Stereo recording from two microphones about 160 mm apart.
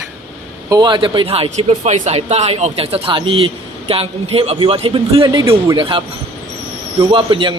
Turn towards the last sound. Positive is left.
turn(degrees=-30)  # may be behind; listen again after turning